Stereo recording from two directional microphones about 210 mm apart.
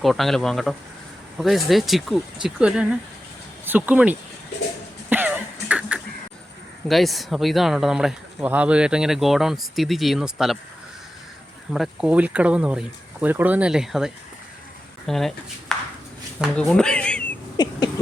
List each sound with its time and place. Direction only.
0.0 s speech: centre (ahead or behind)
5.0 s cough: 10° right (ahead or behind)
6.8 s speech: centre (ahead or behind)
11.7 s speech: centre (ahead or behind)
15.7 s a sound: centre (ahead or behind)
16.4 s speech: 5° left (ahead or behind)
17.6 s a sound: 20° left (ahead or behind)